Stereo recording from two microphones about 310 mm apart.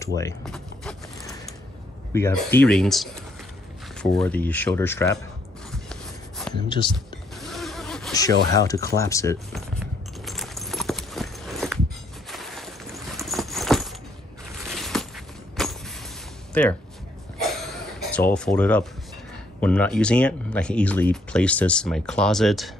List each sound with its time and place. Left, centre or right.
0.0 s mechanisms: centre
2.1 s speech: centre
5.7 s a sound: centre
6.9 s mechanisms: centre
8.3 s speech: right
8.8 s keys jangling: centre
12.3 s a sound: centre
14.6 s walk: centre
16.6 s speech: centre
18.1 s speech: centre